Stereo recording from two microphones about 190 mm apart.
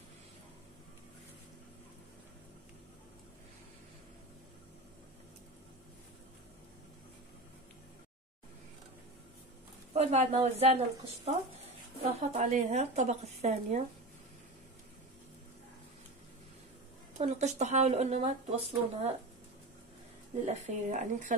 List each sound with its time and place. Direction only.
9.9 s speech: 35° right (ahead or behind)
17.2 s speech: 35° right (ahead or behind)
20.4 s speech: 40° right (ahead or behind)